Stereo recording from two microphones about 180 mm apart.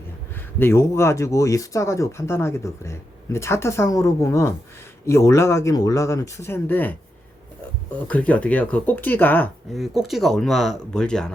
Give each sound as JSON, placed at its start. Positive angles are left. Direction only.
{"t": 0.3, "sound": "speech", "side_deg": 15}
{"t": 7.9, "sound": "speech", "side_deg": 10}
{"t": 9.7, "sound": "speech", "side_deg": 0}